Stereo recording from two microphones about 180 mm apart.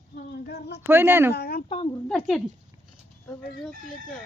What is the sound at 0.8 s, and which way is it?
Speech, 10° right (ahead or behind).